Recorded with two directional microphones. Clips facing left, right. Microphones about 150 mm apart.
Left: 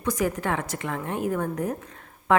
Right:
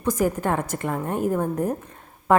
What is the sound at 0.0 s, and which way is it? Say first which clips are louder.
A woman's voice: right 3 dB; 45° right (ahead or behind).